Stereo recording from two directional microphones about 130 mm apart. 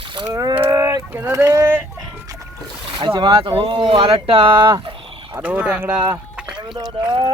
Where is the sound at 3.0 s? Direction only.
35° right (ahead or behind).